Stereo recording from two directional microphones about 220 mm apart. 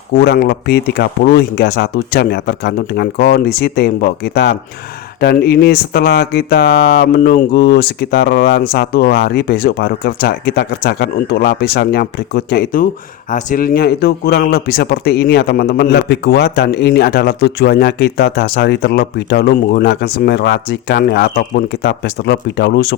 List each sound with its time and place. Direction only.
0.2 s a man's voice: 45° left (ahead or behind)